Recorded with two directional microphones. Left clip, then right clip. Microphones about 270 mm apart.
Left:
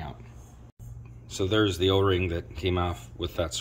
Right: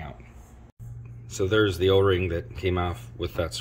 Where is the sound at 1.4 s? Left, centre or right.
Centre.